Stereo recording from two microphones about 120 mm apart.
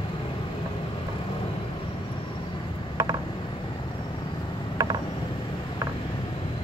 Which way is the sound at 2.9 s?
35° right (ahead or behind).